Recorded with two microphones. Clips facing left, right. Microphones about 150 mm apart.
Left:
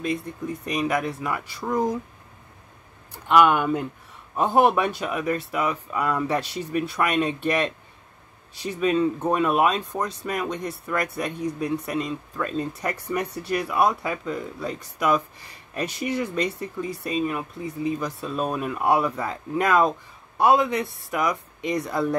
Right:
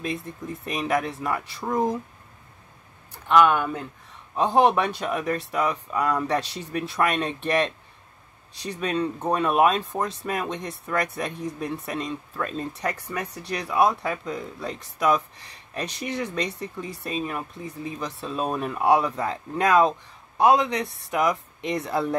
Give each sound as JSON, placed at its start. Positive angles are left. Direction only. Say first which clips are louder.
{"t": 0.1, "sound": "speech", "louder": "left 4 dB", "side_deg": 0}
{"t": 3.3, "sound": "speech", "louder": "left 1 dB", "side_deg": 15}
{"t": 12.9, "sound": "speech", "louder": "left 5 dB", "side_deg": 10}